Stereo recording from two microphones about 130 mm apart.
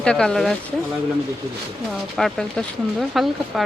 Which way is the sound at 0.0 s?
5° left (ahead or behind).